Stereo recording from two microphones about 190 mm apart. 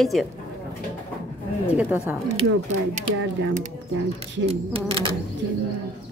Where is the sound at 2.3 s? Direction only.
40° right (ahead or behind).